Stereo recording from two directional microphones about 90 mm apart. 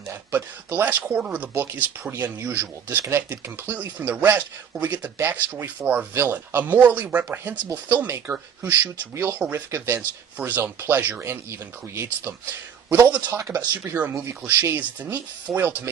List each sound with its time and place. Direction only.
0.1 s speech: 25° right (ahead or behind)
13.3 s speech: 35° right (ahead or behind)
13.7 s speech: 20° right (ahead or behind)